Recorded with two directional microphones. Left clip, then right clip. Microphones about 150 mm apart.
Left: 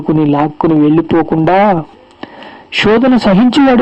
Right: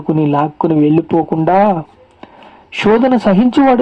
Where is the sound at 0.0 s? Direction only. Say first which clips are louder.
Left 2 dB; 35° left (ahead or behind).